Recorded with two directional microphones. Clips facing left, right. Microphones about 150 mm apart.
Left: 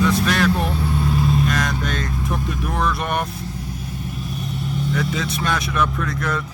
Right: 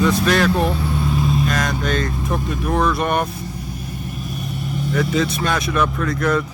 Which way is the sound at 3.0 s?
35° right (ahead or behind).